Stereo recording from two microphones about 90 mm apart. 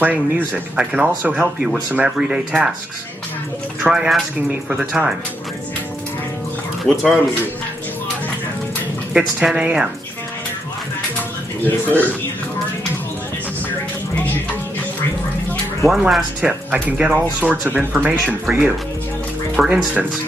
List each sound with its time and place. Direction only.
0.0 s speech: 15° right (ahead or behind)
3.8 s speech: 10° right (ahead or behind)
6.8 s speech: centre (ahead or behind)
9.1 s speech: 5° right (ahead or behind)
11.6 s speech: 20° left (ahead or behind)
14.1 s music: 20° left (ahead or behind)
15.9 s speech: 5° right (ahead or behind)